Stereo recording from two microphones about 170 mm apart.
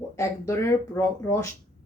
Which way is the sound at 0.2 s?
15° left (ahead or behind).